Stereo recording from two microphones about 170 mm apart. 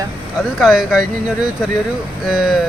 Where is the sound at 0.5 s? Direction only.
Centre (ahead or behind).